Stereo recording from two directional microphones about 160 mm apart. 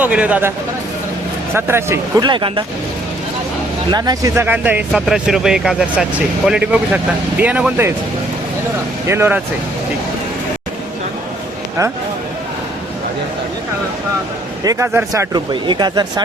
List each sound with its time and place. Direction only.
0.0 s speech: 10° right (ahead or behind)
1.5 s speech: 15° right (ahead or behind)
2.2 s speech: 30° right (ahead or behind)
3.9 s speech: 25° right (ahead or behind)
9.0 s speech: 15° right (ahead or behind)
14.6 s speech: 20° right (ahead or behind)